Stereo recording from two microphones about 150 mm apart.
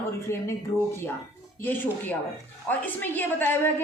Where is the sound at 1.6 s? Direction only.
15° left (ahead or behind).